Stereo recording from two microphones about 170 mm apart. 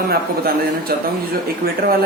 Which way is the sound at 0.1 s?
65° right (ahead or behind).